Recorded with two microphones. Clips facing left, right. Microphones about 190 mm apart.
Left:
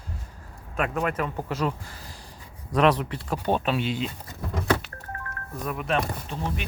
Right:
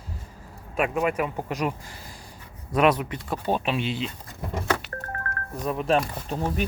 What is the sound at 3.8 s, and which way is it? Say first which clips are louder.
Speech: left 1 dB; 45° left (ahead or behind).